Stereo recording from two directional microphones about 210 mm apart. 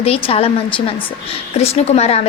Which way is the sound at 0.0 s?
25° left (ahead or behind).